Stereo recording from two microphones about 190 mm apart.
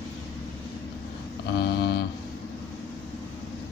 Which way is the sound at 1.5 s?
60° left (ahead or behind).